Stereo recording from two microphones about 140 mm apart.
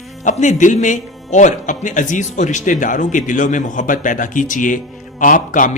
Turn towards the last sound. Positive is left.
turn(degrees=70)  # may be behind; listen again after turning